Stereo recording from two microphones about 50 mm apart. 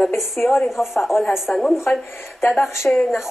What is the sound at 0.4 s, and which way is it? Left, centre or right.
Speech, centre.